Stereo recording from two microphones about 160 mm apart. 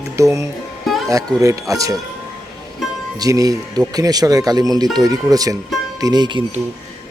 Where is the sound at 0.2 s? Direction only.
20° right (ahead or behind).